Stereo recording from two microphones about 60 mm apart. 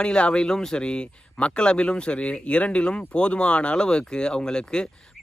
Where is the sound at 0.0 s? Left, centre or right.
Centre.